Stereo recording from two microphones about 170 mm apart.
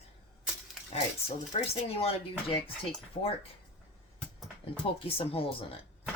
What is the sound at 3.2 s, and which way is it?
Speech, 35° left (ahead or behind).